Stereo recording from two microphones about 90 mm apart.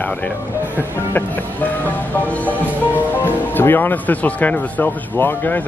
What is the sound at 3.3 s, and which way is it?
Speech, 25° left (ahead or behind).